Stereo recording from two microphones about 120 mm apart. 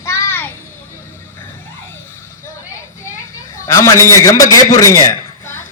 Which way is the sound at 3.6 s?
25° left (ahead or behind).